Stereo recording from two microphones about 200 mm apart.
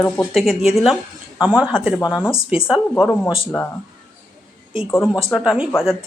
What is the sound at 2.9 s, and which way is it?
Speech, 10° left (ahead or behind).